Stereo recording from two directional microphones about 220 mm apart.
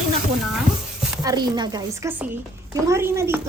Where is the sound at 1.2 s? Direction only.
15° right (ahead or behind).